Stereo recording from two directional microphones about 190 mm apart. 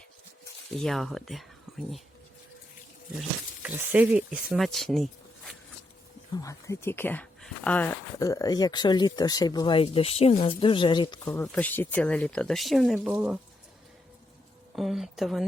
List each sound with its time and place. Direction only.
0.8 s speech: centre (ahead or behind)
3.2 s speech: 5° right (ahead or behind)
6.3 s speech: 15° left (ahead or behind)
8.2 s speech: 20° left (ahead or behind)
11.4 s speech: 5° left (ahead or behind)
14.8 s speech: centre (ahead or behind)